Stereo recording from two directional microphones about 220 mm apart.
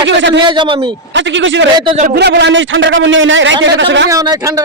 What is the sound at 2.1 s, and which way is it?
A man's voice, 50° right (ahead or behind).